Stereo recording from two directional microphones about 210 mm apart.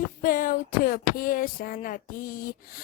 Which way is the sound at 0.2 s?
40° left (ahead or behind).